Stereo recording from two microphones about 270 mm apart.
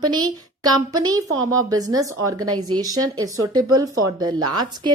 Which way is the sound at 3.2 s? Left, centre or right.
Centre.